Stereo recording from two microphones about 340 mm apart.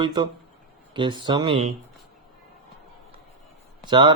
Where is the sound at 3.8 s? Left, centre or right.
Centre.